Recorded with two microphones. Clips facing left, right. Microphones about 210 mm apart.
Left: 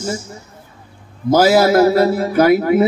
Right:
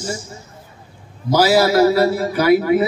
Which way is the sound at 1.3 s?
50° left (ahead or behind).